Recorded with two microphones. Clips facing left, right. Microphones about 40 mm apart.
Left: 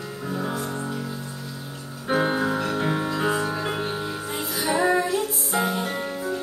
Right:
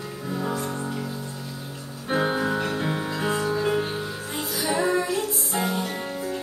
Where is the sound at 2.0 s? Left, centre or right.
Centre.